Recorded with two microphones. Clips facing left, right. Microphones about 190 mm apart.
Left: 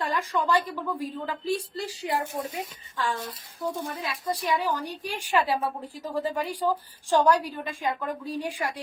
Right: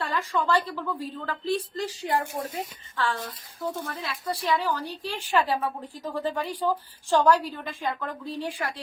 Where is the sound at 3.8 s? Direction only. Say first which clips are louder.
Left 1 dB; 15° left (ahead or behind).